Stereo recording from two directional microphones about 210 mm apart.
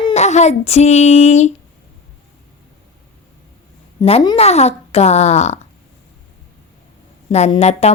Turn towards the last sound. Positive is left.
turn(degrees=30)  # may be behind; listen again after turning